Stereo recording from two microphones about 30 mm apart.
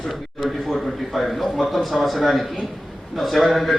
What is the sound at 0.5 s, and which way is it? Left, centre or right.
A man's voice, centre.